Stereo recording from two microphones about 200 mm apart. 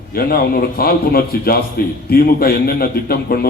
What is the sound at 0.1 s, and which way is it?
A man's voice, 50° left (ahead or behind).